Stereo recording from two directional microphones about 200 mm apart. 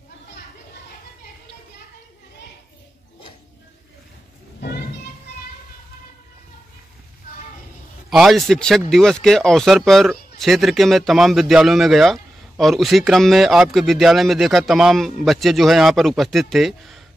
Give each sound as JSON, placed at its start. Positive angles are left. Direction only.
{"t": 4.6, "sound": "children playing", "side_deg": 50}
{"t": 8.1, "sound": "speech", "side_deg": 0}